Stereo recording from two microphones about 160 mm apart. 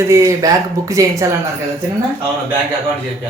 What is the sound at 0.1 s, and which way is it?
Speech, 20° right (ahead or behind).